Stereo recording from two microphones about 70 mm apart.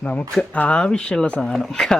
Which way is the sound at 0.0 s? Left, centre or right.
Left.